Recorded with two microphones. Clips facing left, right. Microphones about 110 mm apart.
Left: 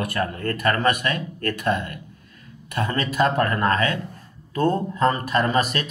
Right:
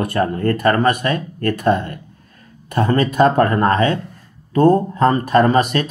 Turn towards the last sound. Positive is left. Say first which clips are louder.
# right 7 dB
turn(degrees=-30)  # may be behind; listen again after turning